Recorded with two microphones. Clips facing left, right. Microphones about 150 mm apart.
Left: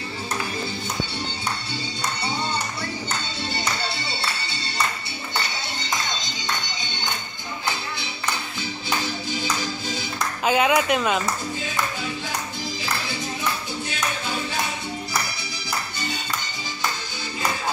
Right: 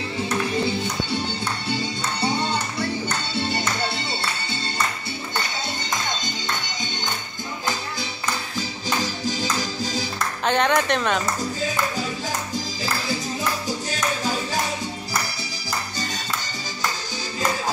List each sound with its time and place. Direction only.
8.5 s music: 40° right (ahead or behind)
10.4 s speech: 5° left (ahead or behind)
13.7 s music: 40° right (ahead or behind)